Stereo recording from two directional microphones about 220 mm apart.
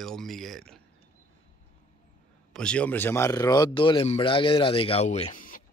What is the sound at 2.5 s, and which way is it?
Speech, 5° left (ahead or behind).